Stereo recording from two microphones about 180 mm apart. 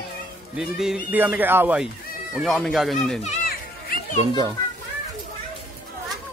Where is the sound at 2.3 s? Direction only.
Centre (ahead or behind).